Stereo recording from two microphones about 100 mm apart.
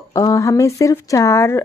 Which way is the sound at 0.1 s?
35° left (ahead or behind).